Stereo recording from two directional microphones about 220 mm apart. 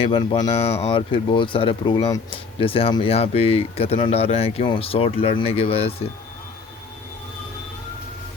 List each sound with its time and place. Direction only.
0.0 s speech: 25° left (ahead or behind)